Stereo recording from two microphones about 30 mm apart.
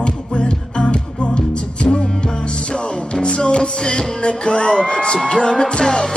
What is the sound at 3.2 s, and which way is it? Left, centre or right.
Music, left.